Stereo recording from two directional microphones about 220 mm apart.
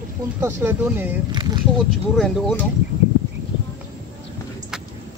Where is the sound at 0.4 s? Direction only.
10° right (ahead or behind).